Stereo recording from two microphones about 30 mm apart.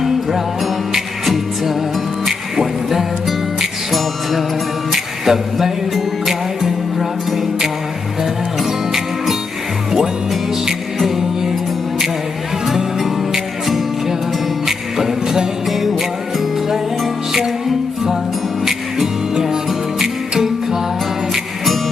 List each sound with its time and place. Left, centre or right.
0.0 s music: centre
8.2 s music: centre
14.7 s music: centre
19.3 s music: centre